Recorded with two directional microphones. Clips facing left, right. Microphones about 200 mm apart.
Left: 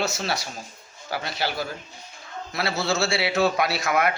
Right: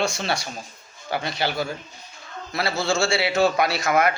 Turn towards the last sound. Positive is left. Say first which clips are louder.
# right 2 dB
turn(degrees=0)  # may be behind; listen again after turning